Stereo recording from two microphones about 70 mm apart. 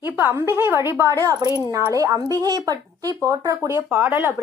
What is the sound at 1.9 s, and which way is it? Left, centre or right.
A woman's voice, right.